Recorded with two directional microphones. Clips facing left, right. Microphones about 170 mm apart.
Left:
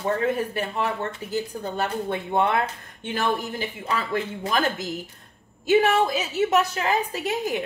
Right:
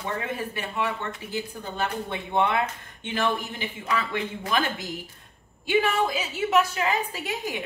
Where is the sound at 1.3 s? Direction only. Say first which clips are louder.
Left 6 dB; 45° left (ahead or behind).